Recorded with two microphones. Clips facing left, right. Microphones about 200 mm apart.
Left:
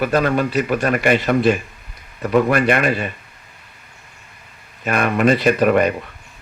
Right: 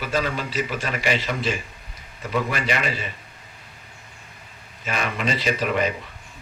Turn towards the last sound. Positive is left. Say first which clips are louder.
# left 8 dB
turn(degrees=55)  # may be behind; listen again after turning